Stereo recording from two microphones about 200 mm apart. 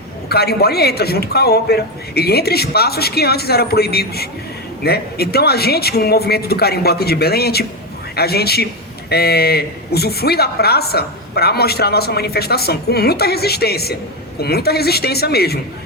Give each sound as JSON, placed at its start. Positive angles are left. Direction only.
{"t": 0.3, "sound": "a woman's voice", "side_deg": 50}